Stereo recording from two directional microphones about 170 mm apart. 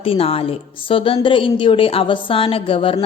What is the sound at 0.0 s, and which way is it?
A woman's voice, 35° left (ahead or behind).